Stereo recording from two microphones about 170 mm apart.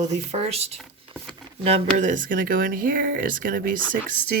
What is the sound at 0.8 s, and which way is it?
Patter, centre (ahead or behind).